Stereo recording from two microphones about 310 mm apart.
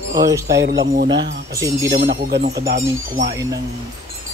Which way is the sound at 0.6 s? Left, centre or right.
Right.